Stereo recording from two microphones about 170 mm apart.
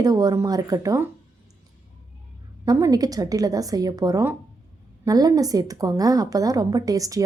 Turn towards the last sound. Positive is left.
turn(degrees=-20)  # may be behind; listen again after turning